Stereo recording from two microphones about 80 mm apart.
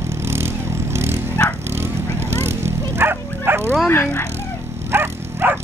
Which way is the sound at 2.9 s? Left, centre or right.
Right.